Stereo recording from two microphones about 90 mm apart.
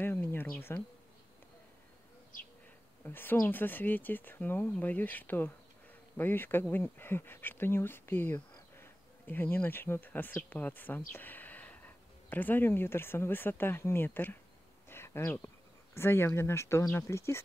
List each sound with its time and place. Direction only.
0.0 s insect: 25° left (ahead or behind)
3.0 s speech: 25° left (ahead or behind)
14.9 s a sound: 25° left (ahead or behind)
15.9 s speech: 25° left (ahead or behind)